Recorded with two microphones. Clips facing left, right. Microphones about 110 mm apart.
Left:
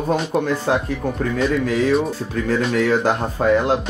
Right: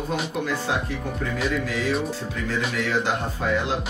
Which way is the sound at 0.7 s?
45° left (ahead or behind).